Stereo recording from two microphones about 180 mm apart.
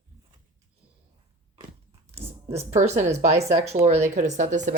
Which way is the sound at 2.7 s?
40° right (ahead or behind).